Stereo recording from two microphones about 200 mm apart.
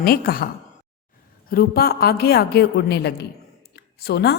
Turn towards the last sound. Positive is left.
turn(degrees=55)  # may be behind; listen again after turning